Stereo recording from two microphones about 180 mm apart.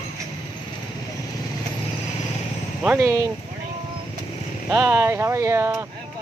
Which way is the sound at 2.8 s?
15° right (ahead or behind).